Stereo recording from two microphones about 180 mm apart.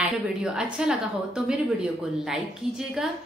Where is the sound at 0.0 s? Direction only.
5° right (ahead or behind).